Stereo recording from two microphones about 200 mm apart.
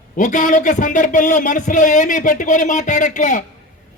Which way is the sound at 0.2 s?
40° left (ahead or behind).